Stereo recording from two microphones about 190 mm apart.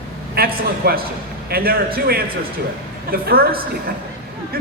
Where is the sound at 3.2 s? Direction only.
55° right (ahead or behind).